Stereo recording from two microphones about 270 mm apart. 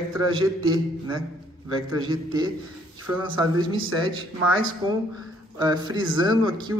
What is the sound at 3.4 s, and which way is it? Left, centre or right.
Speech, centre.